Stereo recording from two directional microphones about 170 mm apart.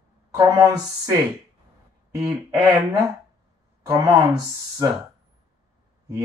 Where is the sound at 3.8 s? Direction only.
15° right (ahead or behind).